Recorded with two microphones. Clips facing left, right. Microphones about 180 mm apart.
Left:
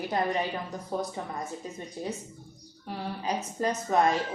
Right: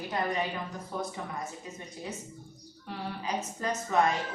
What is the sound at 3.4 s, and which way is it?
Speech, 35° left (ahead or behind).